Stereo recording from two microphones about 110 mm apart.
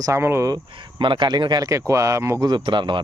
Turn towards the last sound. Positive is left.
turn(degrees=-45)  # may be behind; listen again after turning